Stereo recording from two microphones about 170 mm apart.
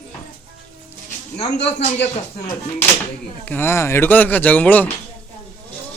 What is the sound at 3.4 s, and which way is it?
Speech, 15° left (ahead or behind).